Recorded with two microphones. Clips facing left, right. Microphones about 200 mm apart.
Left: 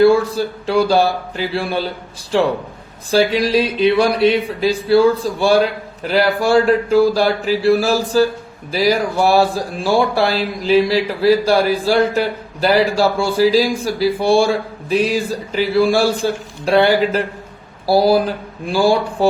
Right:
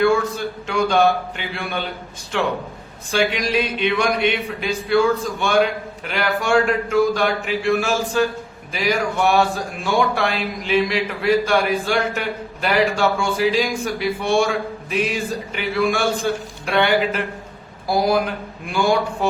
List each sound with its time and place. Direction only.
0.0 s speech: 35° left (ahead or behind)